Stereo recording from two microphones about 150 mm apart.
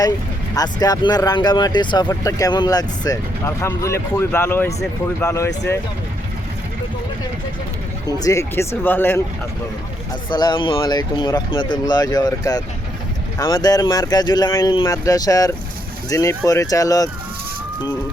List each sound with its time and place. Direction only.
0.5 s speech: 25° left (ahead or behind)
8.0 s speech: 25° left (ahead or behind)
10.2 s speech: 30° left (ahead or behind)